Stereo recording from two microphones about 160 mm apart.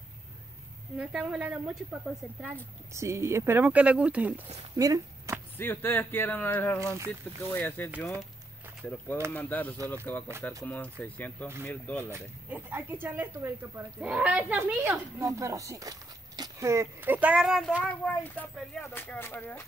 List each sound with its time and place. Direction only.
0.9 s speech: 5° right (ahead or behind)
2.9 s speech: 20° right (ahead or behind)
4.7 s a sound: 20° right (ahead or behind)
5.6 s speech: 15° left (ahead or behind)
6.8 s speech: 15° right (ahead or behind)
7.5 s speech: 10° left (ahead or behind)
12.1 s speech: 10° right (ahead or behind); by 19.6 s 15° left (ahead or behind)